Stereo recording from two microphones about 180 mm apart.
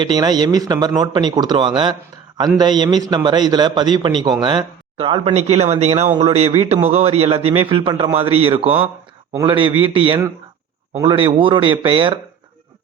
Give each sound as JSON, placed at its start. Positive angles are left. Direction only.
{"t": 0.0, "sound": "a man's voice", "side_deg": -25}